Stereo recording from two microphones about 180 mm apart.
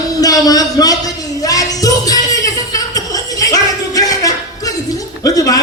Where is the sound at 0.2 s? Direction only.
20° left (ahead or behind).